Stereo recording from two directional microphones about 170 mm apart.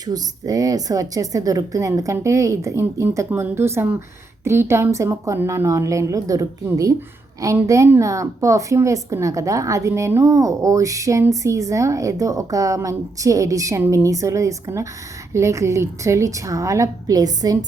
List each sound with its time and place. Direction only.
0.0 s a woman's voice: 20° right (ahead or behind)